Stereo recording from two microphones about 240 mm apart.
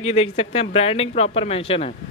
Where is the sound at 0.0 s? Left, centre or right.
Left.